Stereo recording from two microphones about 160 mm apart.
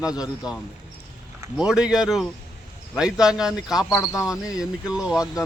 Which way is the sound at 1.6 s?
5° right (ahead or behind).